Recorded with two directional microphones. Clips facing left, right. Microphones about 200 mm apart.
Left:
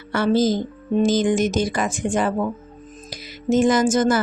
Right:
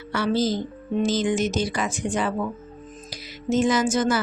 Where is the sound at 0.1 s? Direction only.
50° left (ahead or behind).